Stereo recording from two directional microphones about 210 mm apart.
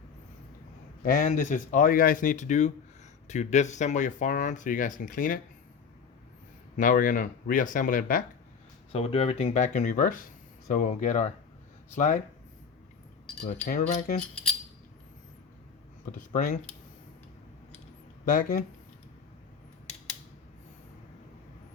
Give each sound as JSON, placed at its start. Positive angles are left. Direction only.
{"t": 1.0, "sound": "speech", "side_deg": 40}
{"t": 6.7, "sound": "speech", "side_deg": 40}
{"t": 8.9, "sound": "speech", "side_deg": 30}
{"t": 13.7, "sound": "speech", "side_deg": 40}
{"t": 16.1, "sound": "speech", "side_deg": 40}
{"t": 18.3, "sound": "speech", "side_deg": 40}